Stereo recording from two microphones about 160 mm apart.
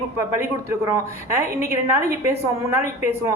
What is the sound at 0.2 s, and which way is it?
A woman's voice, 15° right (ahead or behind).